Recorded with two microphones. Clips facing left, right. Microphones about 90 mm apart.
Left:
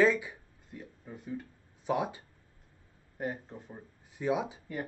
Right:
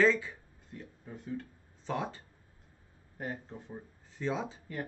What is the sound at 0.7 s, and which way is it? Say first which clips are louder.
Speech: left 1 dB; 5° left (ahead or behind).